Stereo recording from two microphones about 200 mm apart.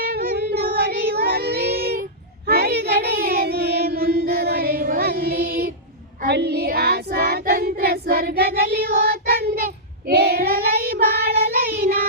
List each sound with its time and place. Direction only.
0.0 s child singing: 50° right (ahead or behind)